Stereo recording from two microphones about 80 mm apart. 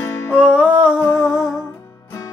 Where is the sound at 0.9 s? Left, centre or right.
Left.